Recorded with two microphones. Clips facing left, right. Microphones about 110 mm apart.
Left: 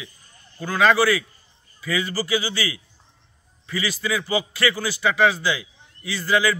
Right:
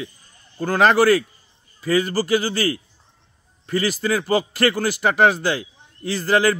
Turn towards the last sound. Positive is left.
turn(degrees=-50)  # may be behind; listen again after turning